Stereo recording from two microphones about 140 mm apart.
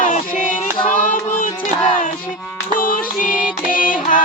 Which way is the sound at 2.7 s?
80° left.